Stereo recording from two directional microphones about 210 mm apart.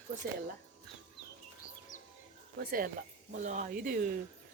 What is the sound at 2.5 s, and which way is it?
Speech, 45° right (ahead or behind).